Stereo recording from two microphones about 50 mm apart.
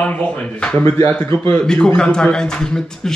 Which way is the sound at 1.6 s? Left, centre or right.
Centre.